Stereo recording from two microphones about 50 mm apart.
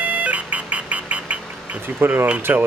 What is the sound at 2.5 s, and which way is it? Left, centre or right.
Speech, right.